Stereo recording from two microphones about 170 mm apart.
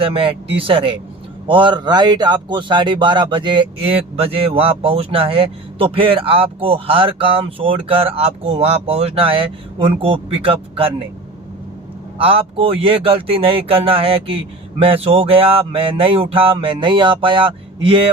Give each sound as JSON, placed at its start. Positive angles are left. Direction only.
{"t": 0.0, "sound": "speech", "side_deg": -30}
{"t": 12.2, "sound": "speech", "side_deg": -35}